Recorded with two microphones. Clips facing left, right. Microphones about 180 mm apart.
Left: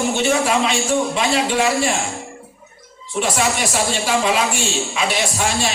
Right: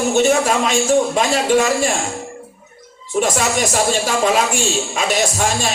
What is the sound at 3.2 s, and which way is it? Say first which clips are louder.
A woman's voice: right 2 dB; 45° right (ahead or behind).